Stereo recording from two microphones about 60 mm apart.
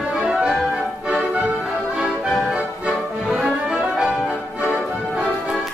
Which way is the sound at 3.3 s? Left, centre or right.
Centre.